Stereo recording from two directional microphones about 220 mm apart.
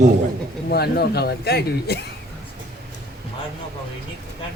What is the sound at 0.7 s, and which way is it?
Speech, 45° left (ahead or behind).